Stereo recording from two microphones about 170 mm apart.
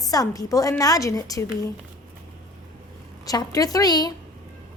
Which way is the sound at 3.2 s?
20° left (ahead or behind).